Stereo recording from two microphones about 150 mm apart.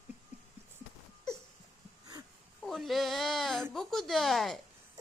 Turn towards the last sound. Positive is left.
turn(degrees=0)  # may be behind; listen again after turning